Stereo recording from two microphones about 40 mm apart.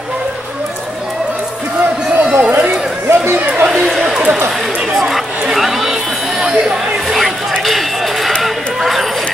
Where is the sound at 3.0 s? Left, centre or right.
Right.